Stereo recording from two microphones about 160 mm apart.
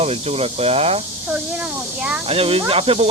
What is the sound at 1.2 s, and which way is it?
Speech, 5° right (ahead or behind).